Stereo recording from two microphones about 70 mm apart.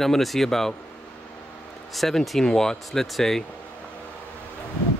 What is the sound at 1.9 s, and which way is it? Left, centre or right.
Speech, centre.